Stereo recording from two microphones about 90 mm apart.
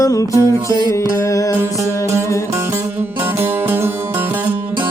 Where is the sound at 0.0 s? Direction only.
40° left (ahead or behind).